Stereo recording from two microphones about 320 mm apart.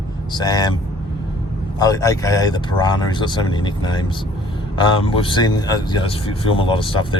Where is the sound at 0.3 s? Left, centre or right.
Centre.